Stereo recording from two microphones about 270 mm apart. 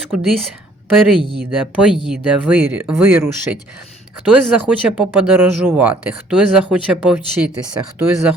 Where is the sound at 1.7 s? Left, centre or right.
Centre.